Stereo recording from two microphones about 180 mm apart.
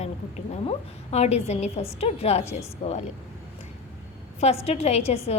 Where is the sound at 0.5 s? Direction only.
35° left (ahead or behind).